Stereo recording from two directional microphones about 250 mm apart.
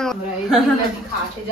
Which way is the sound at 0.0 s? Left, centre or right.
Centre.